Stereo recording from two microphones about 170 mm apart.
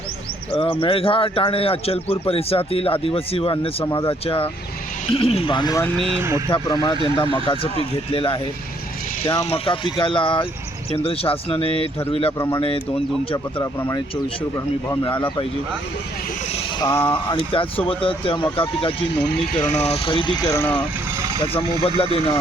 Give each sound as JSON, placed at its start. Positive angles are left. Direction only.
{"t": 0.5, "sound": "a man's voice", "side_deg": 30}
{"t": 3.8, "sound": "speech", "side_deg": 20}
{"t": 5.0, "sound": "speech", "side_deg": 30}
{"t": 6.1, "sound": "speech", "side_deg": -15}
{"t": 6.5, "sound": "a man's voice", "side_deg": 30}
{"t": 12.4, "sound": "speech", "side_deg": 20}
{"t": 16.8, "sound": "speech", "side_deg": 20}
{"t": 17.3, "sound": "a man's voice", "side_deg": 30}
{"t": 21.5, "sound": "a man's voice", "side_deg": 35}